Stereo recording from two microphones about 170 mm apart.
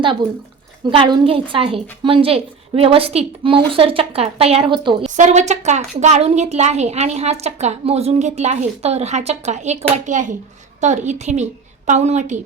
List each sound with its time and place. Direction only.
0.9 s a woman's voice: 30° right (ahead or behind)
5.0 s a woman's voice: 45° right (ahead or behind)